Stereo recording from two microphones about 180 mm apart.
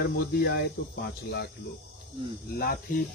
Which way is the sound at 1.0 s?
65° left (ahead or behind).